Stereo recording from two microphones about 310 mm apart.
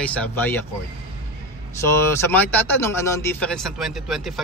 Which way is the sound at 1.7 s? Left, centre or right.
Centre.